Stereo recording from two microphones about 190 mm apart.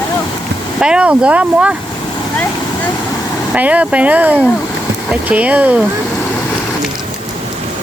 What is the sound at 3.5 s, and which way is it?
Speech, 5° right (ahead or behind).